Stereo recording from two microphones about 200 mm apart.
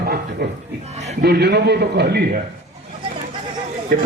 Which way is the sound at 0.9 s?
35° right (ahead or behind).